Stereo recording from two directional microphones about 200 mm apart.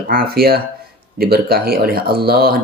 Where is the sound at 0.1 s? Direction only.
50° right (ahead or behind).